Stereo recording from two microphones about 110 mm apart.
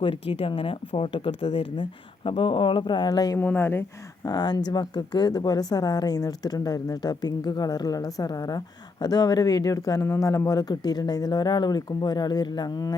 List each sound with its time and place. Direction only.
0.0 s speech: 55° left (ahead or behind); by 3.3 s 40° left (ahead or behind)
3.3 s speech: 20° left (ahead or behind)
4.3 s a woman's voice: 40° left (ahead or behind)